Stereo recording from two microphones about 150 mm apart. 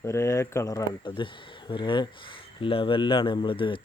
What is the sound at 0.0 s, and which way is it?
Speech, 20° left (ahead or behind).